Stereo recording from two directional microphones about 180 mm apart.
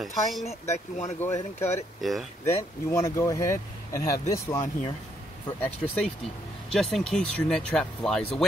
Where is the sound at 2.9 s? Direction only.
15° left (ahead or behind).